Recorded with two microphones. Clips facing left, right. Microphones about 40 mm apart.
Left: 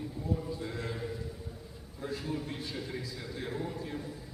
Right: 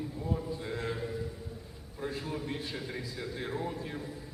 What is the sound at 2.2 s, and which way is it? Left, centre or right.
A man's voice, centre.